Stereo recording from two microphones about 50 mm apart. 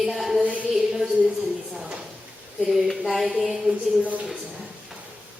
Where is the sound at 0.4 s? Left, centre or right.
Right.